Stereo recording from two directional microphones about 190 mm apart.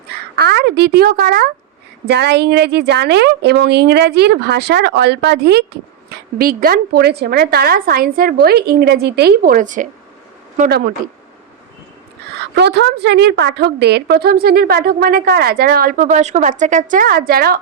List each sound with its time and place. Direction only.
0.1 s a woman's voice: 60° right (ahead or behind); by 9.9 s 40° right (ahead or behind)
10.7 s a woman's voice: 55° right (ahead or behind)
12.4 s a woman's voice: 60° right (ahead or behind)